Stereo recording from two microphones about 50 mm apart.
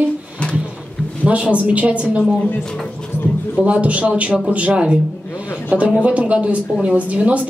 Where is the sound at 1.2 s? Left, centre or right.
Right.